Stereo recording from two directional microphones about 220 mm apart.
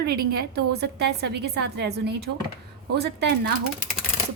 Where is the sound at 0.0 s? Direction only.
45° right (ahead or behind).